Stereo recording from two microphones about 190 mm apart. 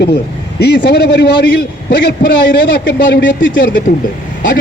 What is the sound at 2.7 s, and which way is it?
Speech, 50° left (ahead or behind).